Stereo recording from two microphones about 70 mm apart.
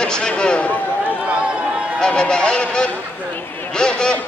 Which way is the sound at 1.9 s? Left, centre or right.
Centre.